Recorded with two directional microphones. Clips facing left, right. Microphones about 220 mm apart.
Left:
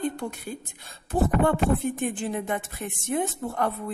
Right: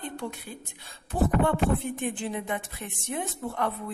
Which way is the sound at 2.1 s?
45° left (ahead or behind).